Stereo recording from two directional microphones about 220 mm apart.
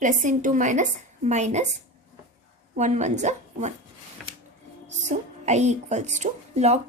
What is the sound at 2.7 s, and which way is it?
Speech, 30° right (ahead or behind).